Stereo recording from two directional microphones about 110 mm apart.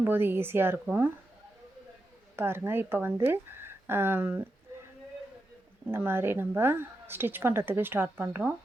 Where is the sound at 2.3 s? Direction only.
20° right (ahead or behind).